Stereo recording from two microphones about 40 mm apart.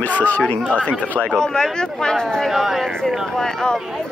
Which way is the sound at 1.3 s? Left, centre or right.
Centre.